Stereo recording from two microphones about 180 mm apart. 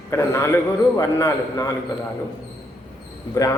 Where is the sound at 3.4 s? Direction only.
20° left (ahead or behind).